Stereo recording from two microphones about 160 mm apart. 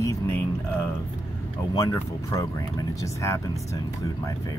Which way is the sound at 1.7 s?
15° left (ahead or behind).